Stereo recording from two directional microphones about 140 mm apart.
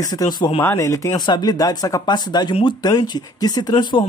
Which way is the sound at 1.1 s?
30° left (ahead or behind).